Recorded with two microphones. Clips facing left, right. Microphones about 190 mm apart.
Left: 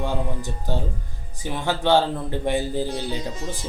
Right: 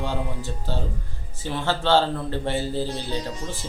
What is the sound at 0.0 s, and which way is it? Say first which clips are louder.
Speech: left 2 dB; 15° left (ahead or behind).